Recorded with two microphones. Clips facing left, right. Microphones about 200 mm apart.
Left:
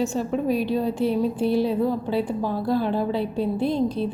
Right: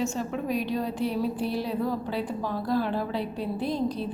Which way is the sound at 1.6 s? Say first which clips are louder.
Left 6 dB; 25° left (ahead or behind).